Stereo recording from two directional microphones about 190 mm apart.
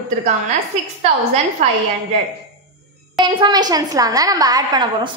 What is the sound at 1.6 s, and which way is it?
Speech, 35° right (ahead or behind).